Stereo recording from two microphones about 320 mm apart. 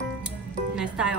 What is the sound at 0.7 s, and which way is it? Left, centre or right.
Music, centre.